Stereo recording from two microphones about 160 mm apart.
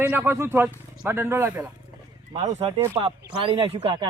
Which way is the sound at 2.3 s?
45° right (ahead or behind).